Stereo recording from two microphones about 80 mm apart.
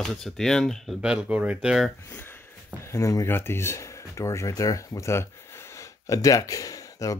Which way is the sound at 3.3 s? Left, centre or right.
Left.